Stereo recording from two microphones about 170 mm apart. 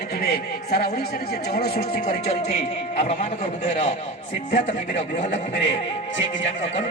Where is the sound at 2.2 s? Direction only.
40° left (ahead or behind).